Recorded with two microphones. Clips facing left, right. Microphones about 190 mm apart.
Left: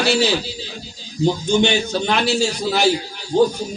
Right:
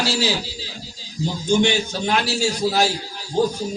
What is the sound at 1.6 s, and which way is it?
A man's voice, 65° left (ahead or behind).